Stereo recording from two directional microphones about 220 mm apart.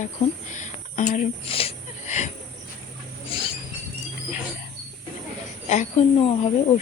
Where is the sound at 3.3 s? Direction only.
25° left (ahead or behind).